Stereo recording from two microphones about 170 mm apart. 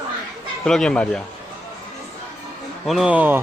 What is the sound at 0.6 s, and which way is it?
Speech, 5° left (ahead or behind).